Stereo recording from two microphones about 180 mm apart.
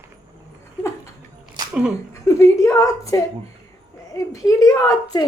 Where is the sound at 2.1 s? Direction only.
15° left (ahead or behind).